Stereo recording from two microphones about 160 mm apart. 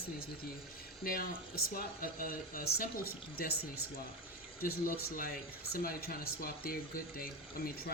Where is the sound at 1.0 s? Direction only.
65° left (ahead or behind).